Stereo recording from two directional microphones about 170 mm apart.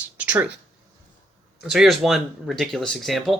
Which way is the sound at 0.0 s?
10° right (ahead or behind).